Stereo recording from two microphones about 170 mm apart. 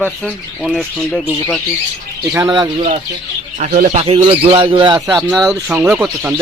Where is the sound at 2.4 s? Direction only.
25° right (ahead or behind).